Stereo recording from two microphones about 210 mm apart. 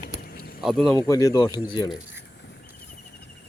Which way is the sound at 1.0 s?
15° left (ahead or behind).